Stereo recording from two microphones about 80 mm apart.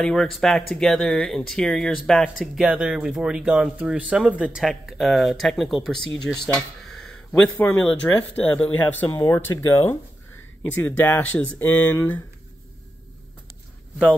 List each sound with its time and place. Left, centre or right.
0.0 s speech: centre
4.6 s speech: centre
6.9 s a sound: centre
7.5 s speech: left
7.8 s speech: centre
9.2 s speech: left